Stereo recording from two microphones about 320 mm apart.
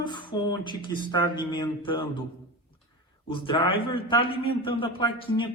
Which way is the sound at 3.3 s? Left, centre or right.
Centre.